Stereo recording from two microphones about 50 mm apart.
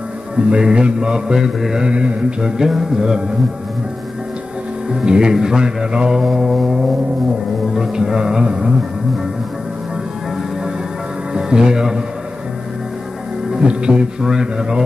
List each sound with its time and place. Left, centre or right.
0.5 s mantra: centre
5.0 s mantra: centre
11.3 s speech: centre
13.5 s mantra: centre